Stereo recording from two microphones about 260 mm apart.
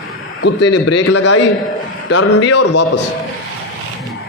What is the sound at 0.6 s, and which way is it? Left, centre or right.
A man's voice, left.